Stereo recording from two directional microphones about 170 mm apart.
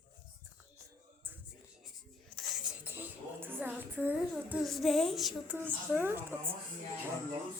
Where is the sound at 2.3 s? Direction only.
5° right (ahead or behind).